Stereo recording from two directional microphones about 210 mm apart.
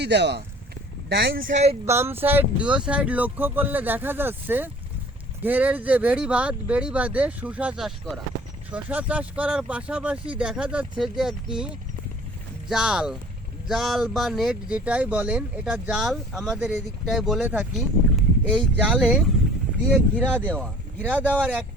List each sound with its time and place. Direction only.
0.0 s speech: 55° right (ahead or behind)
1.5 s speech: 35° right (ahead or behind)
1.9 s speech: 10° right (ahead or behind)